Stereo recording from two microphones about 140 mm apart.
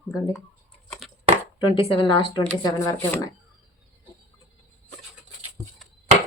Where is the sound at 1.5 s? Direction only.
35° left (ahead or behind).